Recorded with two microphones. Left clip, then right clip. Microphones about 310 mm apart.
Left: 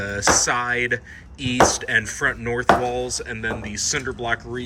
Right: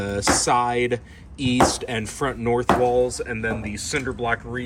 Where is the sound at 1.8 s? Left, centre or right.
Centre.